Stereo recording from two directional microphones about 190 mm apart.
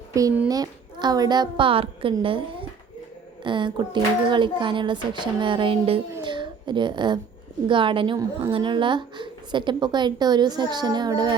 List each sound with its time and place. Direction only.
0.1 s a child's voice: 15° right (ahead or behind)